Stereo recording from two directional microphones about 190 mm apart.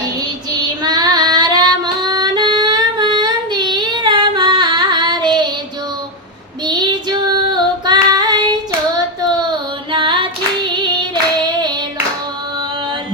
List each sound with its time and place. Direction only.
0.5 s female singing: 20° right (ahead or behind)
6.7 s female singing: 20° right (ahead or behind)